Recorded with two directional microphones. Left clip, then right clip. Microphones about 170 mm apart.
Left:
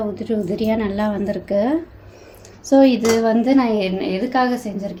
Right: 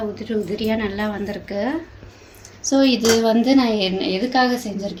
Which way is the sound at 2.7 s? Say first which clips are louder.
Left 4 dB; 20° left (ahead or behind).